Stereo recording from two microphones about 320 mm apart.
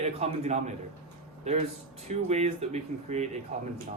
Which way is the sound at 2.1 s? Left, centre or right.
Centre.